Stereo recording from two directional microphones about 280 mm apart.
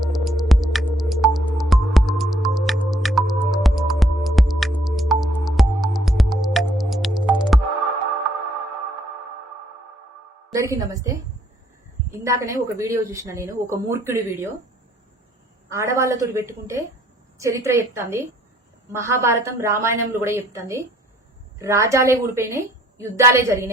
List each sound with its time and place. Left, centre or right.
0.0 s music: centre
10.5 s speech: centre
12.2 s speech: centre
15.7 s speech: centre